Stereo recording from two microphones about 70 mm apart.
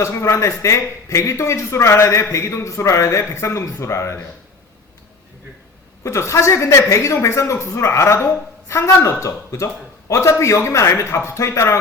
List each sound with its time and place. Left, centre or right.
0.0 s a man's voice: left
6.0 s a man's voice: left